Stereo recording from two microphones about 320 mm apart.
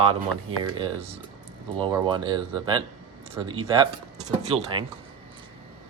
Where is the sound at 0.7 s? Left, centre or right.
Centre.